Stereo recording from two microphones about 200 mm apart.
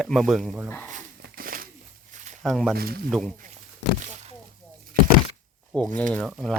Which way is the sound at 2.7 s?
50° right (ahead or behind).